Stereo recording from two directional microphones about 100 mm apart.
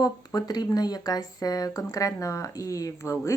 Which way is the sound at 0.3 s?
40° left (ahead or behind).